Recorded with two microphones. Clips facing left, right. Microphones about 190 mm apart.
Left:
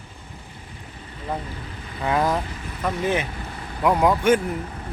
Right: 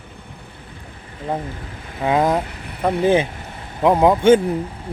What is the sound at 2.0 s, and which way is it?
Speech, 20° right (ahead or behind).